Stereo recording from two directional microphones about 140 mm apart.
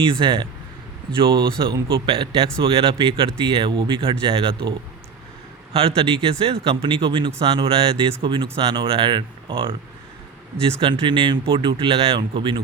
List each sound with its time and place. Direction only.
0.0 s speech: 35° right (ahead or behind)
5.7 s speech: 45° right (ahead or behind)